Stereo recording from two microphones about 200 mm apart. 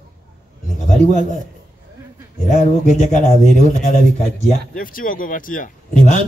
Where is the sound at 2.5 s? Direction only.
35° left (ahead or behind).